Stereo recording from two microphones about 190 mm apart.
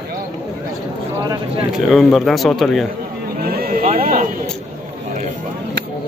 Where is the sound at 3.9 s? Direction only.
45° right (ahead or behind).